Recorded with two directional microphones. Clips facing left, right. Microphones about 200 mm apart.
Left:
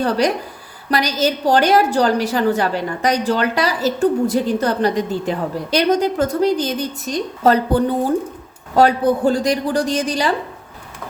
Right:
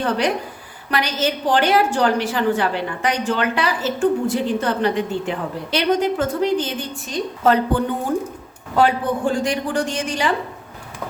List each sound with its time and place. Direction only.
0.0 s a woman's voice: 40° left (ahead or behind)